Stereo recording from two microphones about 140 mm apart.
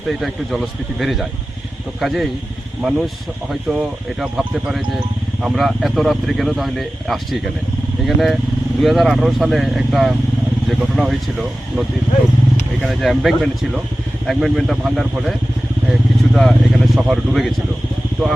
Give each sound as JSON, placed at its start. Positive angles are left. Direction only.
{"t": 0.9, "sound": "speech", "side_deg": 0}
{"t": 3.5, "sound": "speech", "side_deg": -5}